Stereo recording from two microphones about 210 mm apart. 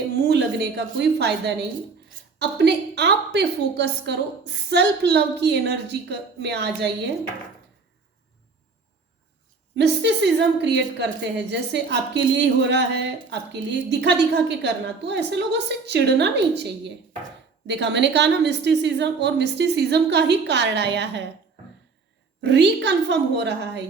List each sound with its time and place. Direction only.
0.3 s a woman's voice: 55° right (ahead or behind)
9.7 s a woman's voice: 55° right (ahead or behind)
22.4 s a woman's voice: 55° right (ahead or behind)